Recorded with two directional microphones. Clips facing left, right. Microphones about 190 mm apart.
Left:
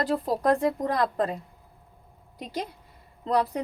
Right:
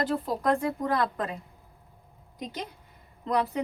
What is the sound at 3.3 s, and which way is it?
Speech, 35° left (ahead or behind).